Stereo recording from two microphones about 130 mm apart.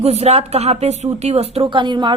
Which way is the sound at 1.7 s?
35° right (ahead or behind).